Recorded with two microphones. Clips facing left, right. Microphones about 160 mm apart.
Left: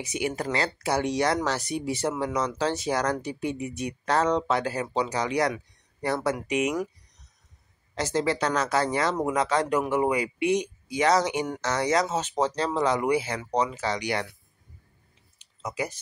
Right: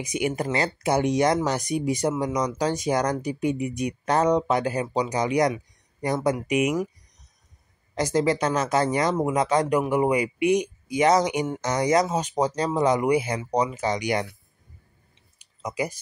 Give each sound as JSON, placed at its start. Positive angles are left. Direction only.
{"t": 0.0, "sound": "speech", "side_deg": -15}
{"t": 7.9, "sound": "speech", "side_deg": -15}
{"t": 15.6, "sound": "speech", "side_deg": -10}